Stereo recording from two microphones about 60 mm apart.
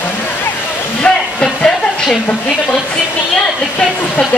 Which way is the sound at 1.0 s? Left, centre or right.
Centre.